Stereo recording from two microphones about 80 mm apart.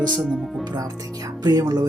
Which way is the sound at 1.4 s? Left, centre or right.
Right.